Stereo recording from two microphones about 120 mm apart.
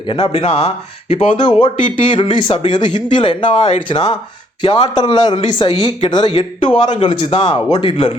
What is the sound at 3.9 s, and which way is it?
Speech, 50° left (ahead or behind).